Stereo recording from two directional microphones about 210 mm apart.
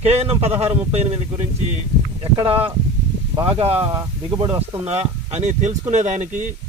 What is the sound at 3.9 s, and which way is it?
Speech, 15° right (ahead or behind).